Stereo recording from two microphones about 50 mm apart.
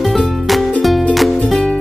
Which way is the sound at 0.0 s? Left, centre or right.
Centre.